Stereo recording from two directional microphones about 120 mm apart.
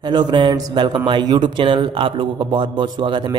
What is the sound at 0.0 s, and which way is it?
Speech, 40° right (ahead or behind).